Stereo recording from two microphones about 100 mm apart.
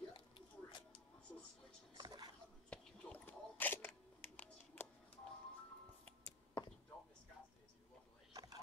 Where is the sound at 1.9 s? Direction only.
40° right (ahead or behind).